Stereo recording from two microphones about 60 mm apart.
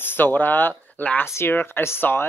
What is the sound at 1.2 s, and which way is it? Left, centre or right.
Speech, left.